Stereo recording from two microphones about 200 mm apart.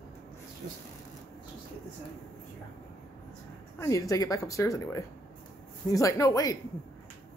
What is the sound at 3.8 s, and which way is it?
Speech, 15° left (ahead or behind).